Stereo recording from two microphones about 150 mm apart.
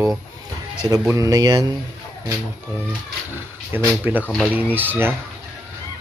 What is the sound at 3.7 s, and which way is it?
Speech, 15° right (ahead or behind).